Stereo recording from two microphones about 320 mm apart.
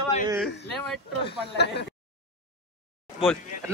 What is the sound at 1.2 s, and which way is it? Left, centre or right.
Speech, left.